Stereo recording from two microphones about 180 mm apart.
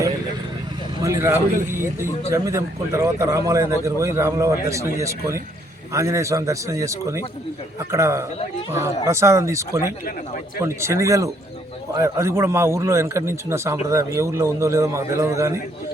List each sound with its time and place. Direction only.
1.0 s a man's voice: 15° right (ahead or behind)